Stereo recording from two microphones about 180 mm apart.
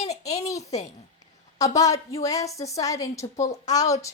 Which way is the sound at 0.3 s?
20° left (ahead or behind).